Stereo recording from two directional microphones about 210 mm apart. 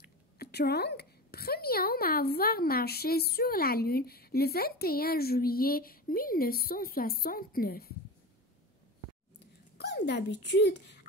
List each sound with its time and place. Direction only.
0.4 s a woman's voice: 50° left (ahead or behind)
9.8 s speech: 50° left (ahead or behind)